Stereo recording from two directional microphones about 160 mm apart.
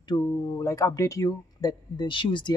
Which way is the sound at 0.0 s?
25° left (ahead or behind).